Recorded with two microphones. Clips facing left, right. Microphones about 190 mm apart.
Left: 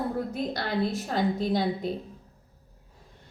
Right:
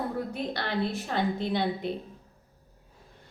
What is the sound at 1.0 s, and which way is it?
Speech, 40° left (ahead or behind).